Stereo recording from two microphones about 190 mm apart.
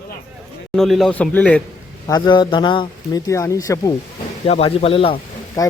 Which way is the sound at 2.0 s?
25° left (ahead or behind).